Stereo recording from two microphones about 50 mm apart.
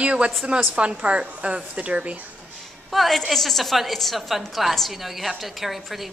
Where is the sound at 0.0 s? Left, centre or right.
Right.